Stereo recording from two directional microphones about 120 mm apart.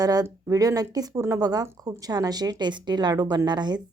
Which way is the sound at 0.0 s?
30° right (ahead or behind).